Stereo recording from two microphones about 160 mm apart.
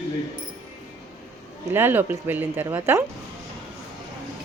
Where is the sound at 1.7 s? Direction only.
15° right (ahead or behind).